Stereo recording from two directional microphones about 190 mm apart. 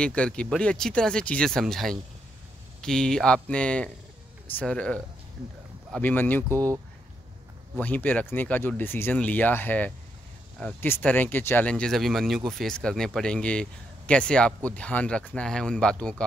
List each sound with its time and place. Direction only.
0.0 s speech: 5° left (ahead or behind)
6.5 s speech: 15° right (ahead or behind)
7.7 s speech: 10° left (ahead or behind)